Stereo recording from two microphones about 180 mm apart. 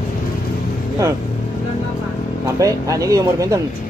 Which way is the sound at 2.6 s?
20° right (ahead or behind).